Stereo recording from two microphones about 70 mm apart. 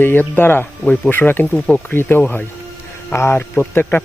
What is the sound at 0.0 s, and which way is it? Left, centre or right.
Speech, left.